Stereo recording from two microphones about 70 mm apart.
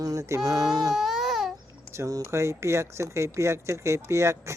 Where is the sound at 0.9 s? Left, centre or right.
Centre.